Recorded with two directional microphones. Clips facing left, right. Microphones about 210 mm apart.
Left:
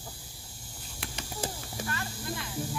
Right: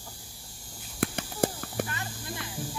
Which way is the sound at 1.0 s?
60° right (ahead or behind).